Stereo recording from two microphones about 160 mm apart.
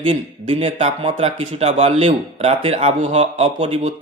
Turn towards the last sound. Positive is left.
turn(degrees=-45)  # may be behind; listen again after turning